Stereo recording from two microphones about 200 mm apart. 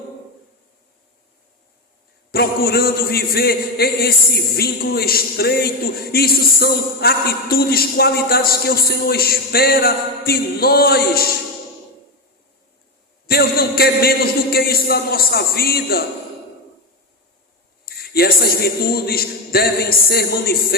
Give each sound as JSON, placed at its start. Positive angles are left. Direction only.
{"t": 2.3, "sound": "a man's voice", "side_deg": 50}
{"t": 13.2, "sound": "a man's voice", "side_deg": 50}
{"t": 17.8, "sound": "a man's voice", "side_deg": 50}